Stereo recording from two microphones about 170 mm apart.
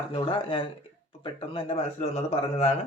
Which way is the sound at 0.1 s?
30° left (ahead or behind).